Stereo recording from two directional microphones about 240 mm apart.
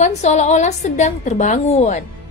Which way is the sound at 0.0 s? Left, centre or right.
Left.